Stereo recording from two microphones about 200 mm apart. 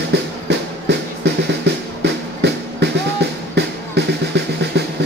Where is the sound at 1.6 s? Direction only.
60° right (ahead or behind).